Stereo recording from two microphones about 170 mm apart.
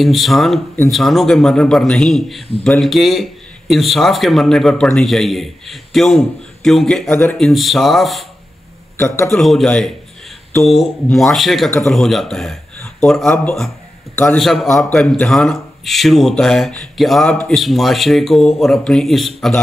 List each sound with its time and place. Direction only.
0.0 s speech: centre (ahead or behind)
7.1 s speech: 15° left (ahead or behind)
7.3 s speech: centre (ahead or behind)
8.9 s a man's voice: 15° left (ahead or behind)
9.3 s a man's voice: centre (ahead or behind)
14.4 s speech: centre (ahead or behind)